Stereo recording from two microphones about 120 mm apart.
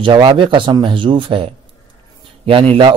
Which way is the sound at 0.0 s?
45° right (ahead or behind).